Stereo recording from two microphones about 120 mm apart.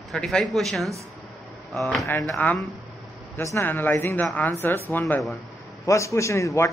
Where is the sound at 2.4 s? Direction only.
15° left (ahead or behind).